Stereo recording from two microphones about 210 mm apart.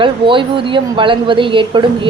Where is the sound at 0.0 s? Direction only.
25° right (ahead or behind).